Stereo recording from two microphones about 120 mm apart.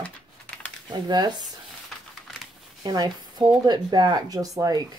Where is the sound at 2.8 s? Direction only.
35° right (ahead or behind).